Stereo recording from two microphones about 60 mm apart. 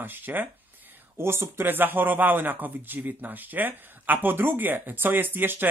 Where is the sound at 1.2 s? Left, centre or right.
Right.